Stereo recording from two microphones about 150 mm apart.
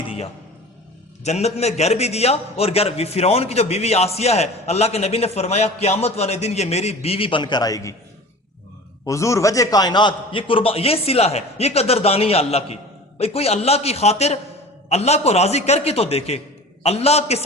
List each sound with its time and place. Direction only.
1.2 s a man's voice: 45° left (ahead or behind); by 7.9 s 20° left (ahead or behind)
9.0 s a man's voice: 20° left (ahead or behind); by 17.4 s 45° left (ahead or behind)